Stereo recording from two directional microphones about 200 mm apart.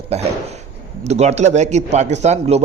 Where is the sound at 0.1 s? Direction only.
30° right (ahead or behind).